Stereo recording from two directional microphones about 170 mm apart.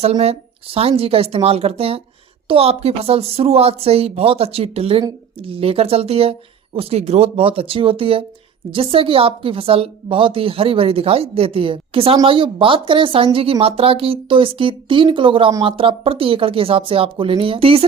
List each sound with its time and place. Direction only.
0.0 s speech: 35° right (ahead or behind)